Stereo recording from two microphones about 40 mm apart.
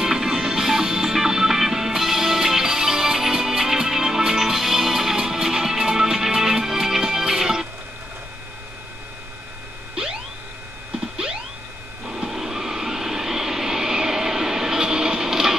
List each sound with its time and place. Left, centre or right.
0.0 s music: centre
12.3 s vehicle: centre